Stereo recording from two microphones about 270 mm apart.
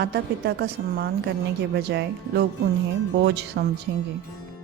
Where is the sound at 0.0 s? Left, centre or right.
Right.